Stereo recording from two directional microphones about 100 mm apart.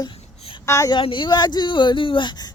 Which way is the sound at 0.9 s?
55° left (ahead or behind).